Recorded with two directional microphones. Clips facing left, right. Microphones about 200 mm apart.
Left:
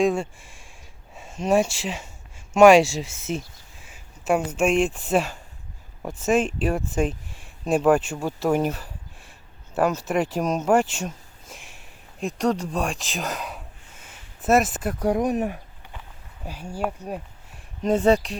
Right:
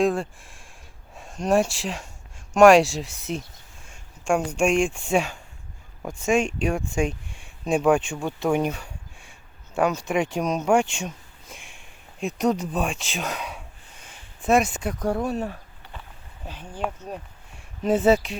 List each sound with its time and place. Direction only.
0.0 s speech: centre (ahead or behind)
15.0 s speech: 15° left (ahead or behind)
17.8 s speech: 5° right (ahead or behind)